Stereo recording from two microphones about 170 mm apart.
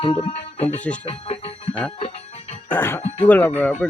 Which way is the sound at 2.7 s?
15° left (ahead or behind).